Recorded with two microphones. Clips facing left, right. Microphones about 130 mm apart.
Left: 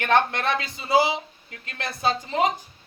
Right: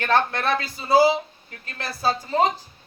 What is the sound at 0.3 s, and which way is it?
A man's voice, 20° left (ahead or behind).